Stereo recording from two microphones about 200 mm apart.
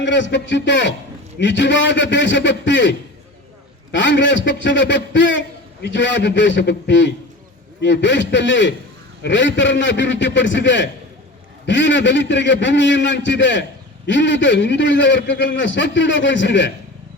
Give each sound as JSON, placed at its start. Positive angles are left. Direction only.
{"t": 0.0, "sound": "a man's voice", "side_deg": 65}
{"t": 3.9, "sound": "a man's voice", "side_deg": 65}